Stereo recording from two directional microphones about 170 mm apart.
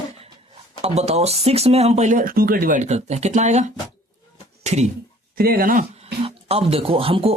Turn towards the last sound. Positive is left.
turn(degrees=-35)  # may be behind; listen again after turning